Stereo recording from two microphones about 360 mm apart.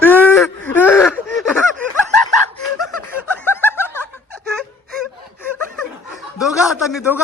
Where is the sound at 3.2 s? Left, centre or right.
Centre.